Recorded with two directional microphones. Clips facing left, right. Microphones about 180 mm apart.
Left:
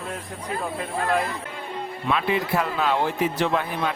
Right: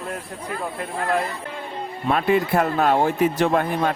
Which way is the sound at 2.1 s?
45° right (ahead or behind).